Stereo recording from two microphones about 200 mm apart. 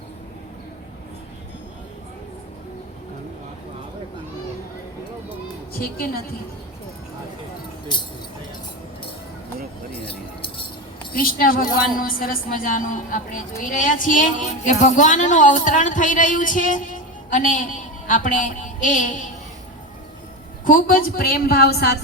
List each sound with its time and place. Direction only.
7.9 s vehicle: 25° left (ahead or behind)
10.0 s chink: 25° left (ahead or behind)
11.1 s a woman's voice: 45° left (ahead or behind)
20.7 s a woman's voice: 45° left (ahead or behind)